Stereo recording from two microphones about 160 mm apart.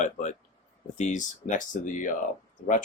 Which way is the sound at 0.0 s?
50° left (ahead or behind).